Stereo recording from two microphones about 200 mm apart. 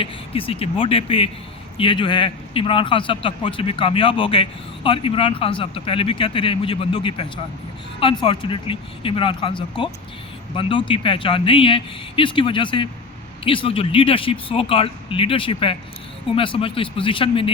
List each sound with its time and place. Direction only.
0.0 s a man's voice: 25° left (ahead or behind)